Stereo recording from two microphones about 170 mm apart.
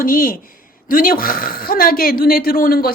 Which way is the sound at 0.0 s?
55° left (ahead or behind).